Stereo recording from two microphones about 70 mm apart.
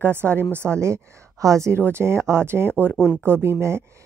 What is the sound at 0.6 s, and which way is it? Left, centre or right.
A woman's voice, right.